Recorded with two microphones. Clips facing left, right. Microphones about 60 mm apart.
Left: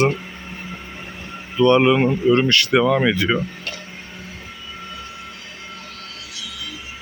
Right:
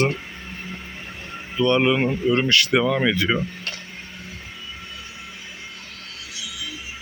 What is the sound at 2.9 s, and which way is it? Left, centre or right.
Speech, centre.